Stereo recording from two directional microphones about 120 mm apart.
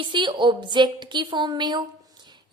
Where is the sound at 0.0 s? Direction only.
40° right (ahead or behind).